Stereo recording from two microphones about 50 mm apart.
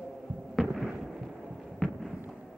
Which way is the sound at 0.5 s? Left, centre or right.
Centre.